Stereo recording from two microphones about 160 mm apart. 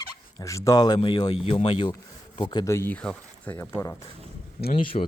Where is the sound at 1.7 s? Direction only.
30° left (ahead or behind).